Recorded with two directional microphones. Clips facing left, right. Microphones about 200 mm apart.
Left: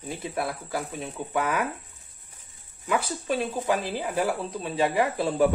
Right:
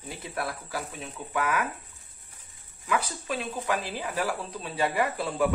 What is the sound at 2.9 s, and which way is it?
Speech, 30° left (ahead or behind).